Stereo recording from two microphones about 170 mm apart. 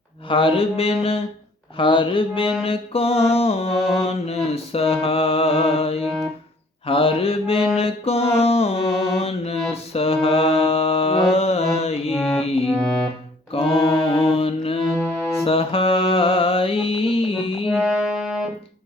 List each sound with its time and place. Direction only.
0.3 s mantra: 30° left (ahead or behind)
12.1 s mantra: centre (ahead or behind)
12.6 s music: 5° left (ahead or behind)
13.5 s mantra: 35° left (ahead or behind)
14.9 s music: 15° left (ahead or behind)
15.4 s mantra: 35° left (ahead or behind)
17.7 s music: centre (ahead or behind)